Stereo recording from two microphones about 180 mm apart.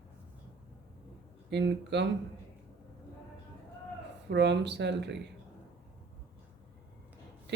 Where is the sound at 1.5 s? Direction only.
75° right (ahead or behind).